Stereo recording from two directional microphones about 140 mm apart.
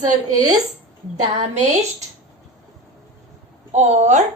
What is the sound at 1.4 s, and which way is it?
Speech, 55° right (ahead or behind).